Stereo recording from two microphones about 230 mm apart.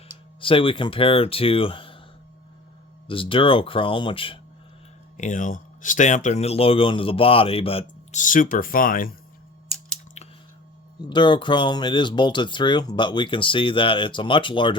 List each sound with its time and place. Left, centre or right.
0.3 s speech: left
3.1 s speech: left
10.2 s a sound: left
10.9 s speech: centre